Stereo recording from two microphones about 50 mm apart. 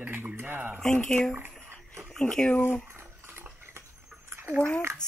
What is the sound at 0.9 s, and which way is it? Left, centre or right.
Speech, left.